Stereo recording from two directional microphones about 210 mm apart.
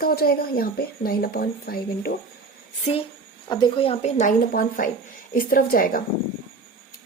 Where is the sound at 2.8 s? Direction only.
30° left (ahead or behind).